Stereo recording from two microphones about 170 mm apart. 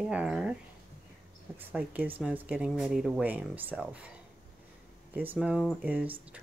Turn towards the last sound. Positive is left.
turn(degrees=-10)  # may be behind; listen again after turning